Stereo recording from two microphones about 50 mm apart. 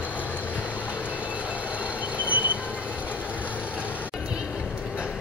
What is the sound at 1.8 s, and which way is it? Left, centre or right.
Vehicle, right.